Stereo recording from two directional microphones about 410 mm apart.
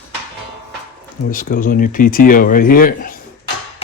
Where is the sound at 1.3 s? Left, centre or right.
Centre.